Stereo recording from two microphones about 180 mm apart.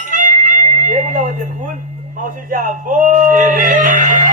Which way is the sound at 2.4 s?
50° right (ahead or behind).